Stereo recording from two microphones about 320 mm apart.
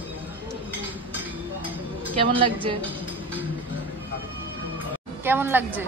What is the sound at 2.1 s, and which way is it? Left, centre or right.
Speech, centre.